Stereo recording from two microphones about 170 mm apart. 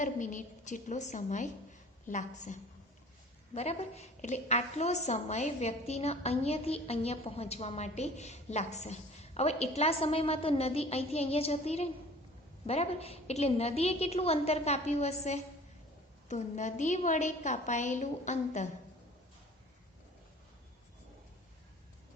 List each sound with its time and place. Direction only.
0.0 s a woman's voice: 50° left (ahead or behind)